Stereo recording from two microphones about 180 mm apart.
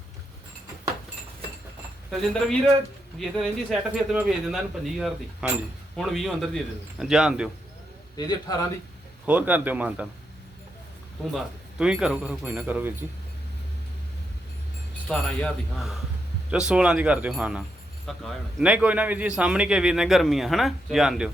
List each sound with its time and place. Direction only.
2.0 s a man's voice: centre (ahead or behind)
8.1 s a man's voice: 20° left (ahead or behind)
9.2 s speech: 10° right (ahead or behind)
11.3 s speech: 5° right (ahead or behind)
15.0 s a man's voice: 5° left (ahead or behind)